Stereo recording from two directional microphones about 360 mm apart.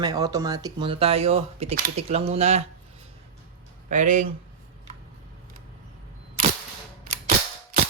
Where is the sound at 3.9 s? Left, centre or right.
Right.